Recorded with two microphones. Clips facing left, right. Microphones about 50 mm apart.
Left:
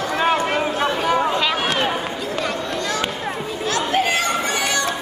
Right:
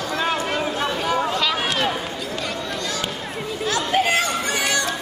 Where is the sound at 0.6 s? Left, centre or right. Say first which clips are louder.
Left 3 dB; left.